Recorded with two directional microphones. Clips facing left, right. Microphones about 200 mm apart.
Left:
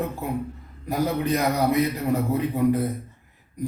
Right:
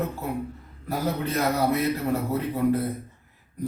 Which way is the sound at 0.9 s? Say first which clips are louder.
Left 3 dB; 15° left (ahead or behind).